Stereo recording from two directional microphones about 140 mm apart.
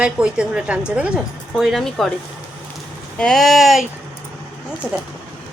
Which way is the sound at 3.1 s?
5° left (ahead or behind).